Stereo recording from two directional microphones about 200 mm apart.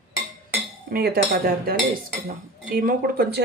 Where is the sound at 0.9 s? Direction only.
50° right (ahead or behind).